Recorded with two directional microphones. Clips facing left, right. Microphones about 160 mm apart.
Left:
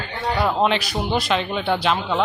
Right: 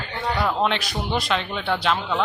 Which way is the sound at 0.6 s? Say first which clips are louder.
Left 3 dB; centre (ahead or behind).